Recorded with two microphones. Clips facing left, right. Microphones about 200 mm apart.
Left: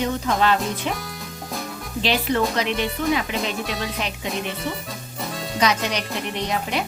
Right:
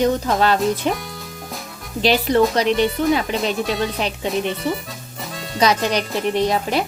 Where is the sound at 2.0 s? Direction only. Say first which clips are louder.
Right 6 dB; 40° right (ahead or behind).